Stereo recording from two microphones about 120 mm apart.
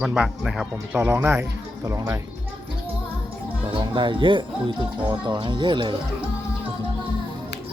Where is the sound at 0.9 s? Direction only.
15° right (ahead or behind).